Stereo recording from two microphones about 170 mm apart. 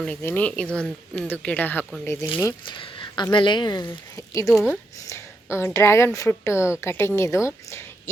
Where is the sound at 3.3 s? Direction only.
30° left (ahead or behind).